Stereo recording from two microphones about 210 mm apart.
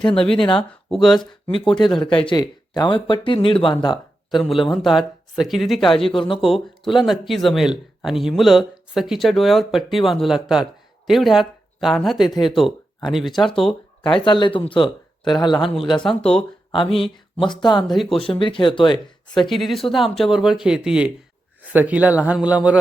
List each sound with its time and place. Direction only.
0.0 s speech: 25° left (ahead or behind)
0.9 s speech: centre (ahead or behind)
2.0 s speech: 25° left (ahead or behind)
4.3 s speech: centre (ahead or behind)
6.1 s speech: 25° left (ahead or behind)
6.4 s speech: centre (ahead or behind)
12.3 s speech: 20° left (ahead or behind)
12.5 s speech: centre (ahead or behind)
14.0 s speech: 20° left (ahead or behind)
16.0 s speech: 5° left (ahead or behind)
16.7 s speech: 25° left (ahead or behind)
17.8 s speech: centre (ahead or behind)
18.2 s speech: 25° left (ahead or behind)
19.5 s speech: centre (ahead or behind)